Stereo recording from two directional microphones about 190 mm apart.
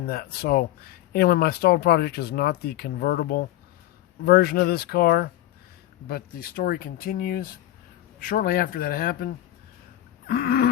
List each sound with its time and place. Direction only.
0.1 s speech: 55° left (ahead or behind)